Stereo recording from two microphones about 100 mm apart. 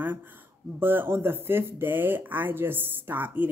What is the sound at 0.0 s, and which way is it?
Speech, 20° right (ahead or behind).